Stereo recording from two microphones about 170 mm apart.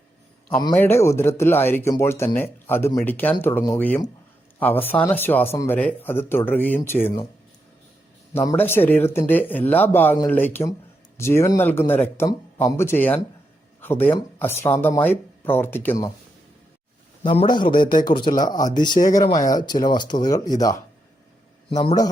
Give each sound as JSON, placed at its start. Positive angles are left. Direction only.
{"t": 0.8, "sound": "speech", "side_deg": 15}
{"t": 8.3, "sound": "speech", "side_deg": 15}
{"t": 17.2, "sound": "speech", "side_deg": 30}